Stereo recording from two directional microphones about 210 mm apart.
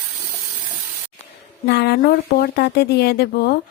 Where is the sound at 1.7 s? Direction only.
50° left (ahead or behind).